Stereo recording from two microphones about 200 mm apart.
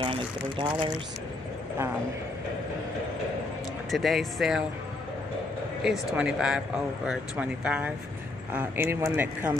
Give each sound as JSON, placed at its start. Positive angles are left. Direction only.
{"t": 0.0, "sound": "speech", "side_deg": -25}
{"t": 3.9, "sound": "speech", "side_deg": 0}
{"t": 5.9, "sound": "speech", "side_deg": -5}